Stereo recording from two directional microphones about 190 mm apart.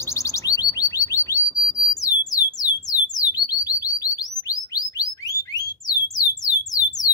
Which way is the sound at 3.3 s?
20° left (ahead or behind).